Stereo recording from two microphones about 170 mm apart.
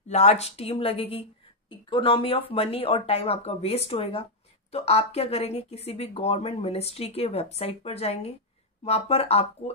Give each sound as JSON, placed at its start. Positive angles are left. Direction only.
{"t": 0.1, "sound": "speech", "side_deg": 40}